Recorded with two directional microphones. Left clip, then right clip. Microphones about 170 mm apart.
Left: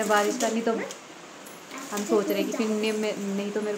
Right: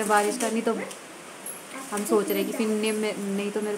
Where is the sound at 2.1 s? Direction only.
5° right (ahead or behind).